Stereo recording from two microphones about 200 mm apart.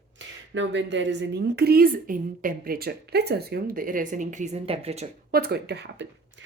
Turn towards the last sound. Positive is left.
turn(degrees=-55)  # may be behind; listen again after turning